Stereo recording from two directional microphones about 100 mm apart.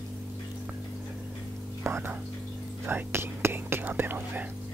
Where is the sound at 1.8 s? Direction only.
25° right (ahead or behind).